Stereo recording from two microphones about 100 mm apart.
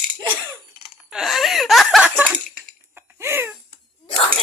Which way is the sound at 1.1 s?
Centre (ahead or behind).